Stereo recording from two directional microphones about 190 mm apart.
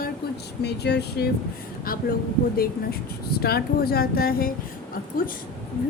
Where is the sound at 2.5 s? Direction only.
50° left (ahead or behind).